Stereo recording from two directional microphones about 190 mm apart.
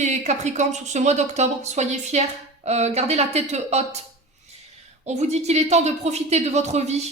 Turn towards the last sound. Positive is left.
turn(degrees=-35)  # may be behind; listen again after turning